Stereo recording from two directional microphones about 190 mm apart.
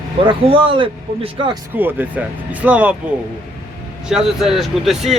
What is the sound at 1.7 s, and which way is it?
Speech, 10° right (ahead or behind).